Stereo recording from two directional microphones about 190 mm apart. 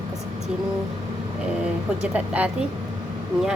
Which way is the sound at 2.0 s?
5° right (ahead or behind).